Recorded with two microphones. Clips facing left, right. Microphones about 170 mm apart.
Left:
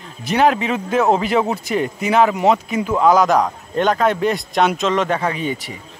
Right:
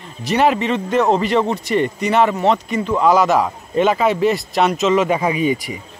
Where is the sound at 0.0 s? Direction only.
Centre (ahead or behind).